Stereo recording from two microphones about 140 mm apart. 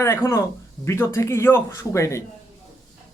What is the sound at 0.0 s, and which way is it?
A man's voice, 20° left (ahead or behind).